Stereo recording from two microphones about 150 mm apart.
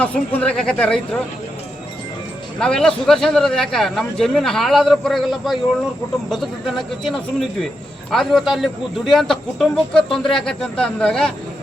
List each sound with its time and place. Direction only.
0.0 s speech: 10° left (ahead or behind)
2.6 s speech: 5° left (ahead or behind)